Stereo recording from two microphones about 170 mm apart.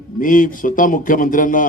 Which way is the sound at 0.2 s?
50° left (ahead or behind).